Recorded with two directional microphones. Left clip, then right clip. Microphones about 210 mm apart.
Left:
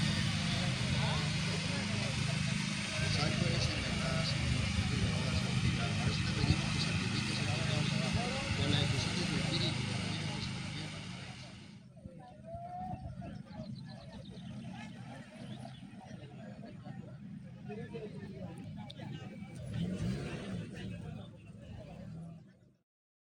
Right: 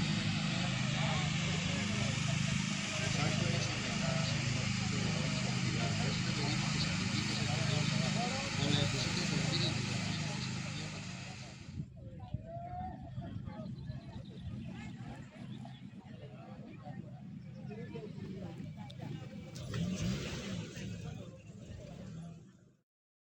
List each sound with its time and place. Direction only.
0.2 s vehicle: 30° left (ahead or behind)
1.4 s vehicle: 5° left (ahead or behind); by 11.2 s 25° right (ahead or behind)